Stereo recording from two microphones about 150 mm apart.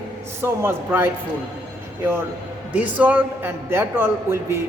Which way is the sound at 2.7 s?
10° right (ahead or behind).